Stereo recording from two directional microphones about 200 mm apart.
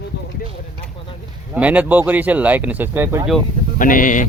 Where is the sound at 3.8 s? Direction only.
40° left (ahead or behind).